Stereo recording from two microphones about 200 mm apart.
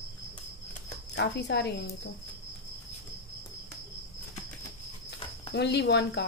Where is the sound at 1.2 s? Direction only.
55° left (ahead or behind).